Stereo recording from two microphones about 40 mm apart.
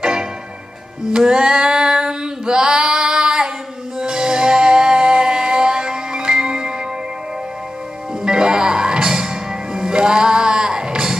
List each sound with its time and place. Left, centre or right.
0.0 s music: centre
1.3 s female singing: centre
4.0 s music: centre
8.2 s music: centre